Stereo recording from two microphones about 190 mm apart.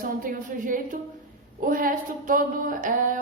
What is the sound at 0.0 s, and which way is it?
Speech, 45° right (ahead or behind).